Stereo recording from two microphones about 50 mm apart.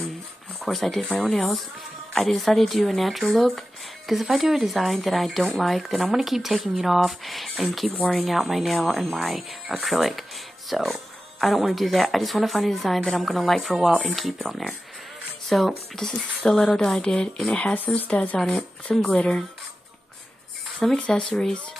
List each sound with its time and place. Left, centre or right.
0.6 s speech: centre
17.0 s speech: centre
17.7 s speech: left; by 19.4 s centre
20.8 s speech: centre